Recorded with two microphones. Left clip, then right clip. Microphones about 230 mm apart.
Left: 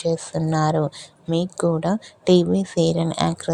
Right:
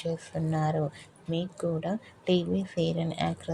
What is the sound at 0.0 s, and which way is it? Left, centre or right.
Speech, left.